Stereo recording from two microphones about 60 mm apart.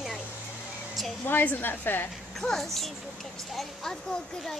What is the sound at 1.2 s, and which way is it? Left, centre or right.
Speech, left.